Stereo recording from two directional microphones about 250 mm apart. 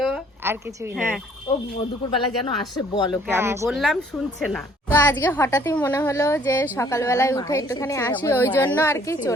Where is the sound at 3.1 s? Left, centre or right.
Centre.